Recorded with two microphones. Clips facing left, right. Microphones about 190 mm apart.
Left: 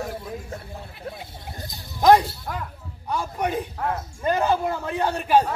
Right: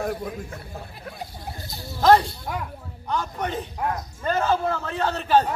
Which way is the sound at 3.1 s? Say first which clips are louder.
Left 2 dB; 10° left (ahead or behind).